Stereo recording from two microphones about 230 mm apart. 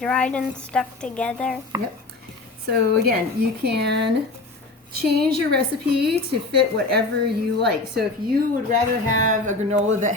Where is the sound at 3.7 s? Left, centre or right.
Right.